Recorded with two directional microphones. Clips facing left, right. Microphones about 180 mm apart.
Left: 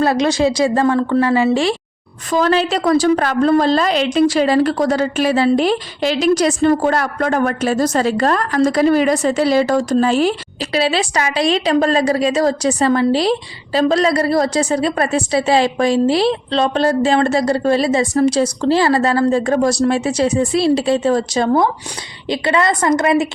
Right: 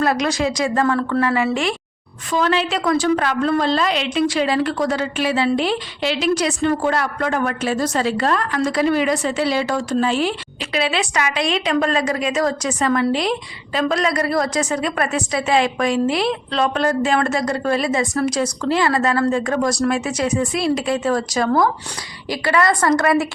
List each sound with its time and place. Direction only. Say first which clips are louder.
0.0 s a woman's voice: left 4 dB; 30° left (ahead or behind)